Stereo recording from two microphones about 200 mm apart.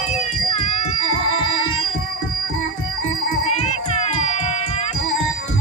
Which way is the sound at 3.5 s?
30° left (ahead or behind).